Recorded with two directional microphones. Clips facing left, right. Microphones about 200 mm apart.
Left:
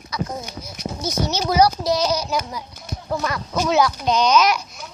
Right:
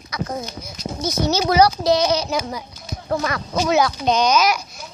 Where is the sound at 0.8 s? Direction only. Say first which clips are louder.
Even; 70° left (ahead or behind).